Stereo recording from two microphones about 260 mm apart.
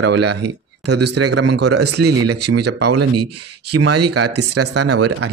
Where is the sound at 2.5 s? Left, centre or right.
Right.